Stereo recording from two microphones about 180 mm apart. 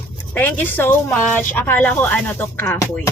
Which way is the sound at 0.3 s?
10° left (ahead or behind).